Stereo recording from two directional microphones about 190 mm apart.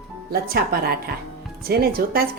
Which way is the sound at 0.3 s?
55° right (ahead or behind).